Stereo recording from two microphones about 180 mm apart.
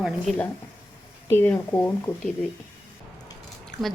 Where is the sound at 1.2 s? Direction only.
10° left (ahead or behind).